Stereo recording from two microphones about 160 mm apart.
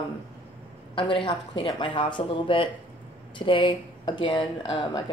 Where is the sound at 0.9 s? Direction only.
30° left (ahead or behind).